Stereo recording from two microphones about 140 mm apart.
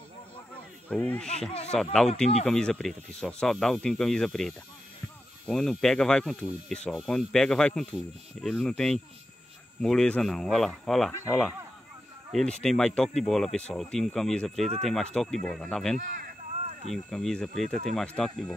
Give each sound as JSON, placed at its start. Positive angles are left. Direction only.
{"t": 0.8, "sound": "speech", "side_deg": 10}
{"t": 16.0, "sound": "speech", "side_deg": -90}
{"t": 16.9, "sound": "speech", "side_deg": 5}